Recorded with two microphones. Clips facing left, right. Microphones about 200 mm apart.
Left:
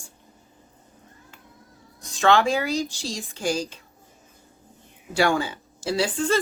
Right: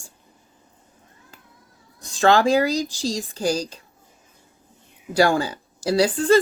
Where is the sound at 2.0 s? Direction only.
35° right (ahead or behind).